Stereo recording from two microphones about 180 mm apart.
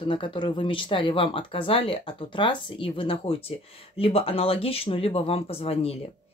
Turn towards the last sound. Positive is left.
turn(degrees=35)  # may be behind; listen again after turning